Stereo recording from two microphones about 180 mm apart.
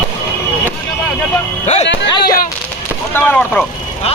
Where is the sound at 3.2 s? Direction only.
10° left (ahead or behind).